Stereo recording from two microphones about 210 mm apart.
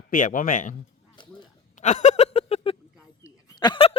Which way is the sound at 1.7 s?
35° left (ahead or behind).